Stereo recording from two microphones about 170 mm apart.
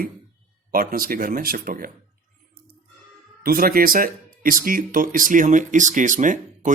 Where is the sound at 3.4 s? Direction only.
60° right (ahead or behind).